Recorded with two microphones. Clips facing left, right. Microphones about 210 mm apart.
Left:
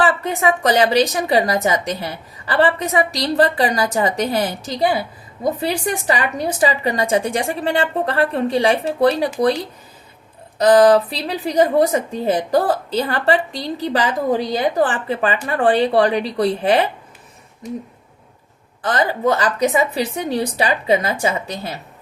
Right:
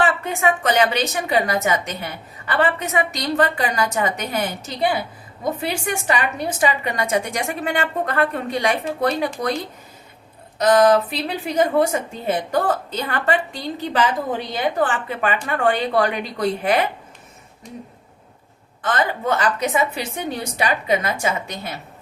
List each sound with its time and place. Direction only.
0.0 s speech: 35° left (ahead or behind)
10.6 s speech: 35° left (ahead or behind)
18.8 s speech: 35° left (ahead or behind)